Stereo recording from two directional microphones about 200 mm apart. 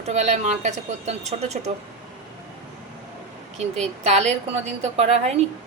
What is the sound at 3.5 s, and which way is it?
Speech, 35° right (ahead or behind).